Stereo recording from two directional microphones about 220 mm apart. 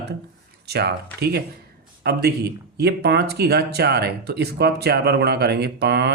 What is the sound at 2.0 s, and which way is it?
Speech, 45° right (ahead or behind).